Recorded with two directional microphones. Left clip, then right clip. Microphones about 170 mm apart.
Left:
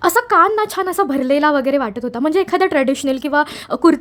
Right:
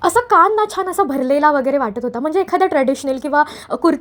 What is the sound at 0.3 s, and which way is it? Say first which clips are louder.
A woman's voice: right 1 dB; 5° left (ahead or behind).